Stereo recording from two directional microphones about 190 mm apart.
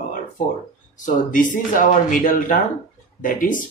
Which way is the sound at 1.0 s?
45° left (ahead or behind).